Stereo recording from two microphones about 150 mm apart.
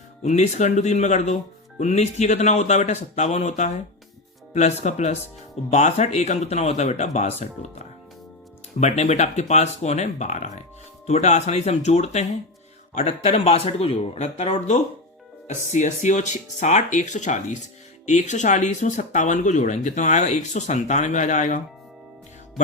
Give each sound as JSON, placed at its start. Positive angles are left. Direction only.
{"t": 0.2, "sound": "speech", "side_deg": 50}
{"t": 8.8, "sound": "speech", "side_deg": 45}